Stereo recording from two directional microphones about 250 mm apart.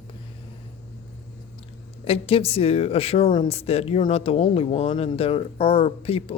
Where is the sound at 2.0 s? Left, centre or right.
Left.